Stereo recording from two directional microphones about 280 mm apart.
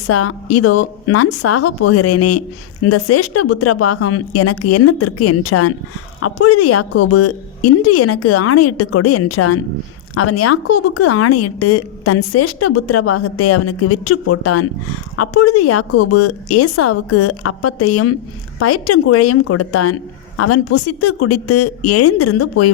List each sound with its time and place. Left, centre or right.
0.1 s a woman's voice: left